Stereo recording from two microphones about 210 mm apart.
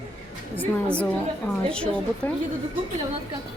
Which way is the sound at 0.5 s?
5° left (ahead or behind).